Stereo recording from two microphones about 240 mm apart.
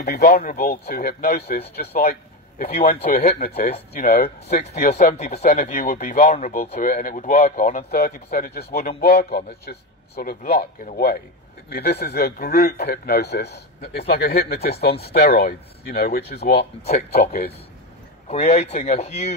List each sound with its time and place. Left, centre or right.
0.0 s speech: left
4.9 s speech: left
18.3 s speech: left